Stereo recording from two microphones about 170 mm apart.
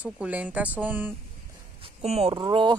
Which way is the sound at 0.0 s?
10° right (ahead or behind).